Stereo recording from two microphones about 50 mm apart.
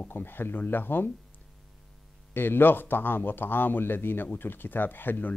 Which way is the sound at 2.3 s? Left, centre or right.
Left.